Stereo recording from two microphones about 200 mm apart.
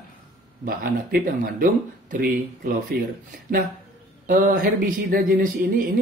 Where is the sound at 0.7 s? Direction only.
45° right (ahead or behind).